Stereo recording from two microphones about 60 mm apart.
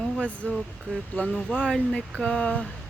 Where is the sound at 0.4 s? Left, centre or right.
Left.